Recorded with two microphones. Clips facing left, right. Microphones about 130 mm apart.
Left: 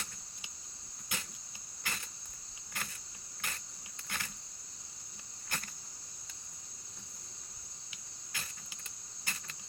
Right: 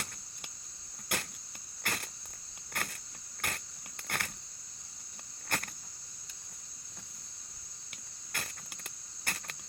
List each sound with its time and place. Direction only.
1.0 s cricket: 60° right (ahead or behind)
4.1 s a sound: 60° right (ahead or behind)
5.5 s cricket: 60° right (ahead or behind)
8.3 s cricket: 60° right (ahead or behind)